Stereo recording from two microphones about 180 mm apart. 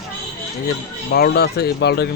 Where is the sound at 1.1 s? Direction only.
60° left (ahead or behind).